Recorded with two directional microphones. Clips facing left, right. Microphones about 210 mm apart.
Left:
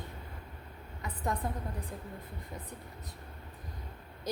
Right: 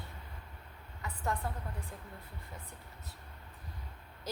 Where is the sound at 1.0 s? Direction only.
15° left (ahead or behind).